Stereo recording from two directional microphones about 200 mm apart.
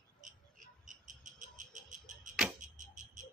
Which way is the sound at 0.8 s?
40° right (ahead or behind).